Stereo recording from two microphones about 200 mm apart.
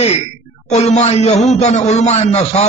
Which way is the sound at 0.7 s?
35° left (ahead or behind).